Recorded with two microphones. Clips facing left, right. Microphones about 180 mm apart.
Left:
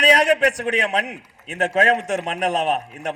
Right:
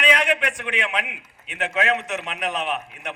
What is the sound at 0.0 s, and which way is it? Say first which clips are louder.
A man's voice: left 6 dB; 40° left (ahead or behind).